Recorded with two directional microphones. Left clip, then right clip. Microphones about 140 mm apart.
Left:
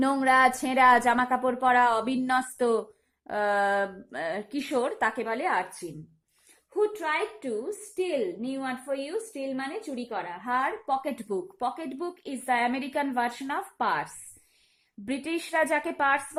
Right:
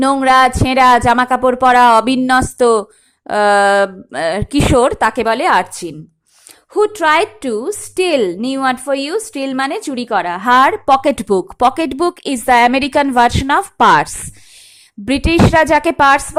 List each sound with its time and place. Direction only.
0.0 s speech: 25° right (ahead or behind)
6.7 s a woman's voice: 55° right (ahead or behind)